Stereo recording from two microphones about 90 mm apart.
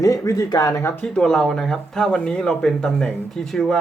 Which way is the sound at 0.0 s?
40° left (ahead or behind).